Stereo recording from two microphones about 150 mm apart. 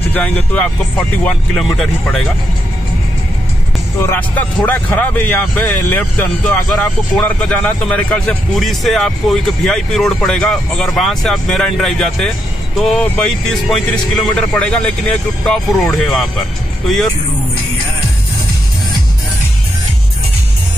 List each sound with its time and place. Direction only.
0.1 s speech: 10° left (ahead or behind)
4.0 s speech: 15° left (ahead or behind)